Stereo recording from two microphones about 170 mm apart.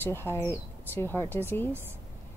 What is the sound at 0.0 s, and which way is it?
Speech, 15° left (ahead or behind).